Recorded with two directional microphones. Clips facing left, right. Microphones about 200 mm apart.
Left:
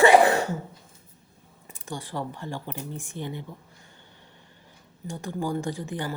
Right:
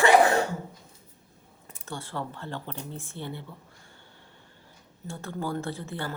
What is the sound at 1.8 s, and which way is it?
Speech, 15° left (ahead or behind).